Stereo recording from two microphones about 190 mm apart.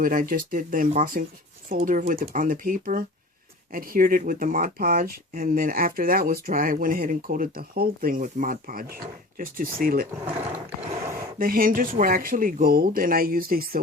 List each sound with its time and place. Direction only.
0.0 s speech: 45° right (ahead or behind)
11.3 s speech: 50° right (ahead or behind)